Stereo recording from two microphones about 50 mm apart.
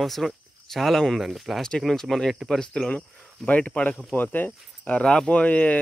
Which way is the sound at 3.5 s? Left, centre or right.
Left.